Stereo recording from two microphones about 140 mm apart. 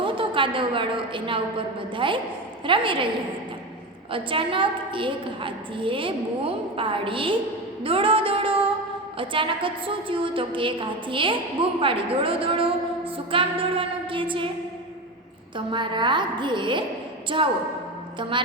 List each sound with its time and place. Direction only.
0.0 s a woman's voice: 35° right (ahead or behind)
4.1 s a woman's voice: 40° right (ahead or behind)
15.5 s a woman's voice: 35° right (ahead or behind)